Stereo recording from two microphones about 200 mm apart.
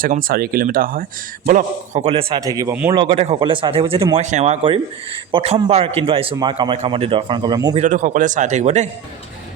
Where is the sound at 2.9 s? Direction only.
25° right (ahead or behind).